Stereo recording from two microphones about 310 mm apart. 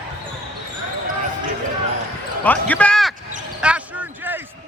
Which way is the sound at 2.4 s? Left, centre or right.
Centre.